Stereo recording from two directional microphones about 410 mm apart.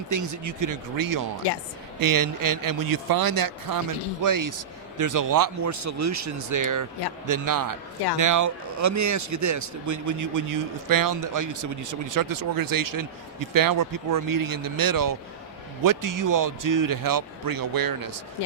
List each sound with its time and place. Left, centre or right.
0.1 s speech: right